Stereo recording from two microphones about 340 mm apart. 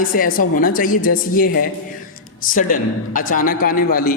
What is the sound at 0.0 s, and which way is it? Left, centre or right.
A man's voice, left.